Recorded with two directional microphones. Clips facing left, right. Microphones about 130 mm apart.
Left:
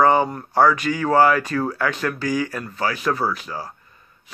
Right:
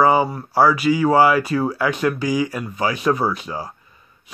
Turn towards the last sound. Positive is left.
turn(degrees=-15)  # may be behind; listen again after turning